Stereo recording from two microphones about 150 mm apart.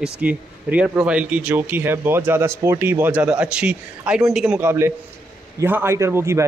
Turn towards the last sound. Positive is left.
turn(degrees=-20)  # may be behind; listen again after turning